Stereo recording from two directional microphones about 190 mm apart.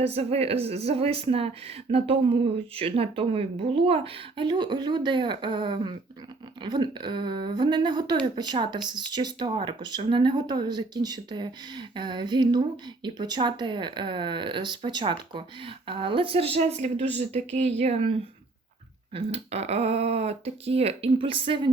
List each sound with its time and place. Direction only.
0.0 s speech: 30° right (ahead or behind)